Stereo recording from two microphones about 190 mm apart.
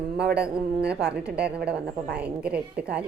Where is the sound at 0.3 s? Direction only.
5° right (ahead or behind).